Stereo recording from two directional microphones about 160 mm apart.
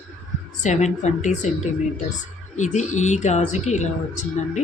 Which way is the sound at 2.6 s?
50° left (ahead or behind).